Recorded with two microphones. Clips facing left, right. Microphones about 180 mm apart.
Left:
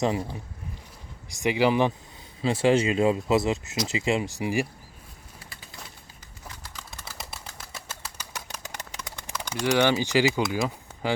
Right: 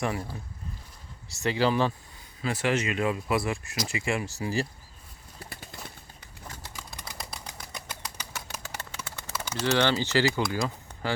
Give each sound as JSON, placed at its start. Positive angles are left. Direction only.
{"t": 0.0, "sound": "speech", "side_deg": 20}
{"t": 2.4, "sound": "speech", "side_deg": 30}
{"t": 7.7, "sound": "bird flight", "side_deg": -15}
{"t": 9.0, "sound": "bird", "side_deg": 15}
{"t": 9.6, "sound": "speech", "side_deg": 15}